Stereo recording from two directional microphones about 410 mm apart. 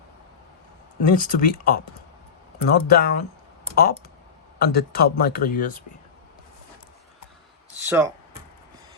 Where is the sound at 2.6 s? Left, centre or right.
Left.